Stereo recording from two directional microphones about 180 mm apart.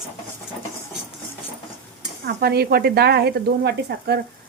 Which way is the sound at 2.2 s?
60° right (ahead or behind).